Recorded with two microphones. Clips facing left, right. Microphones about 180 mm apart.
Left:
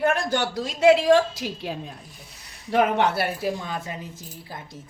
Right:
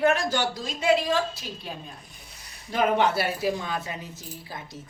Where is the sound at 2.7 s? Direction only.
65° left (ahead or behind).